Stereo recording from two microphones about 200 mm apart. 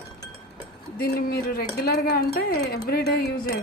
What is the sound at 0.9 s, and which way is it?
Speech, 50° left (ahead or behind).